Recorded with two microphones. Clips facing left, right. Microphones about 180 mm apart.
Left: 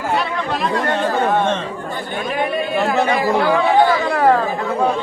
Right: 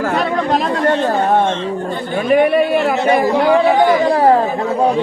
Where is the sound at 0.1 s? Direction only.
45° right (ahead or behind).